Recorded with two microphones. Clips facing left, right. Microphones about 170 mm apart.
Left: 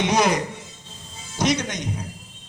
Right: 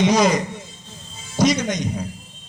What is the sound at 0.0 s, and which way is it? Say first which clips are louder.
Speech: right 3 dB; 60° left (ahead or behind).